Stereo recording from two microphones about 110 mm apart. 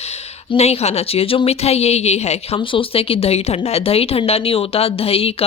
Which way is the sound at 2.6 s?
55° left (ahead or behind).